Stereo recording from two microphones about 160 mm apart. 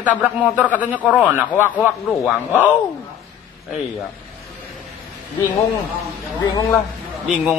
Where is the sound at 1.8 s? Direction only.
15° left (ahead or behind).